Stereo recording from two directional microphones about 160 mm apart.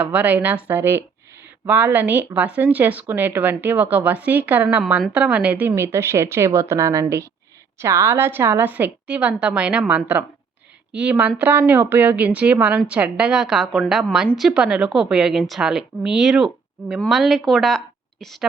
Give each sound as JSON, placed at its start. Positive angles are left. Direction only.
{"t": 0.0, "sound": "a woman's voice", "side_deg": -10}